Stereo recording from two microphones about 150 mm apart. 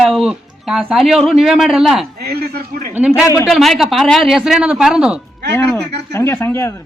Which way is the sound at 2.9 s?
5° right (ahead or behind).